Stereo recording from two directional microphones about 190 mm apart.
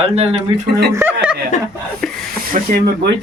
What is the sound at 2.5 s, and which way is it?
Speech, 40° right (ahead or behind).